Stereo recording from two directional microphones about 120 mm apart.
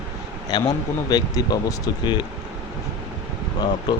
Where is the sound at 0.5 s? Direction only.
40° left (ahead or behind).